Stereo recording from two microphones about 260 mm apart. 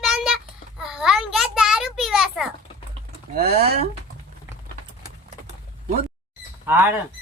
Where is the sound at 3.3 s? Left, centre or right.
Right.